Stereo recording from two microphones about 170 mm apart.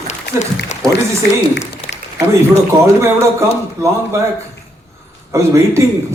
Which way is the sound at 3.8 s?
20° right (ahead or behind).